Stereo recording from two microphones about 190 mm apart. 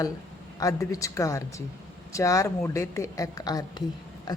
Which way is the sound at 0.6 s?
15° left (ahead or behind).